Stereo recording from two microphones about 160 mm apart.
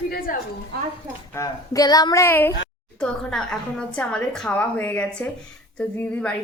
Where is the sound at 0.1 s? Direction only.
65° left (ahead or behind).